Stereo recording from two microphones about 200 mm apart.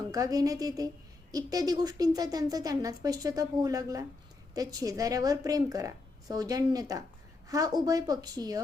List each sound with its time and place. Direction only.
0.1 s speech: 15° right (ahead or behind)